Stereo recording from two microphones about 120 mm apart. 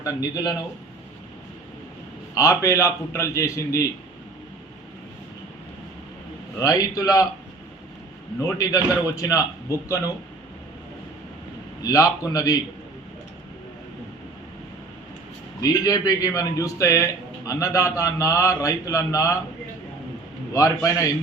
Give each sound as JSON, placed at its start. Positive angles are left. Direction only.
{"t": 0.0, "sound": "a man's voice", "side_deg": 30}
{"t": 2.3, "sound": "speech", "side_deg": 25}
{"t": 6.6, "sound": "speech", "side_deg": 30}
{"t": 8.4, "sound": "speech", "side_deg": 25}
{"t": 11.9, "sound": "speech", "side_deg": 30}
{"t": 15.6, "sound": "speech", "side_deg": 30}
{"t": 20.5, "sound": "speech", "side_deg": 30}